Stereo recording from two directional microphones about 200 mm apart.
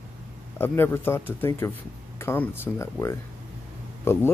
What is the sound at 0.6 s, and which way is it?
Speech, 10° left (ahead or behind).